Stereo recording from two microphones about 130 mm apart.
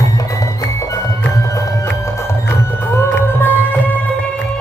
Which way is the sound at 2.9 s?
20° left (ahead or behind).